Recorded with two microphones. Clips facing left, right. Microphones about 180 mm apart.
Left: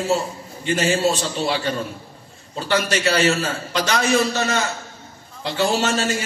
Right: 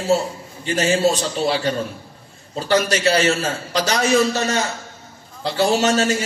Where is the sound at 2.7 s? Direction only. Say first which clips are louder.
Right 3 dB; 35° right (ahead or behind).